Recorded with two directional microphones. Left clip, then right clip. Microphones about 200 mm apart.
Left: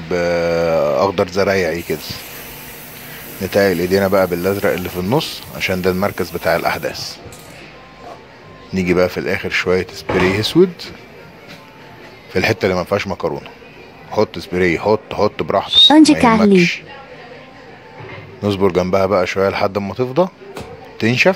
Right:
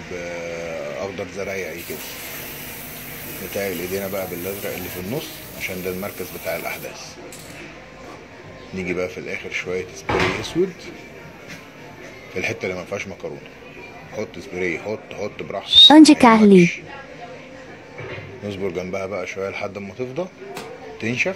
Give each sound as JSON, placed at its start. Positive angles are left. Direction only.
{"t": 0.1, "sound": "a sound", "side_deg": 50}
{"t": 3.5, "sound": "speech", "side_deg": 50}
{"t": 8.7, "sound": "speech", "side_deg": 50}
{"t": 12.4, "sound": "speech", "side_deg": 50}
{"t": 15.7, "sound": "speech", "side_deg": 0}
{"t": 16.5, "sound": "speech", "side_deg": 50}
{"t": 18.4, "sound": "a man's voice", "side_deg": 50}